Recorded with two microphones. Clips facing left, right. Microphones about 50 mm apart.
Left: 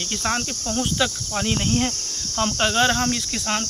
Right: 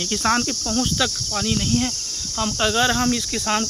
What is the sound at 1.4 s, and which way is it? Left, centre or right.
Speech, left.